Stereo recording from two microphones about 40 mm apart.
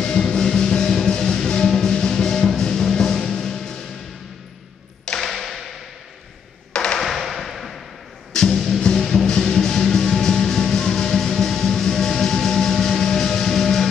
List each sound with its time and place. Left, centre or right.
0.0 s music: left
5.2 s tap: centre
6.7 s tap: left
7.0 s tap: centre
8.5 s music: centre
9.0 s music: centre